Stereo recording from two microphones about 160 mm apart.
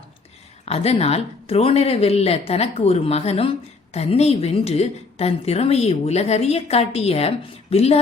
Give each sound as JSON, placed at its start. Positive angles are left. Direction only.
{"t": 0.6, "sound": "a woman's voice", "side_deg": 40}